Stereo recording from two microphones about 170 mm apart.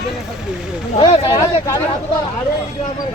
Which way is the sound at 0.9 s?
30° left (ahead or behind).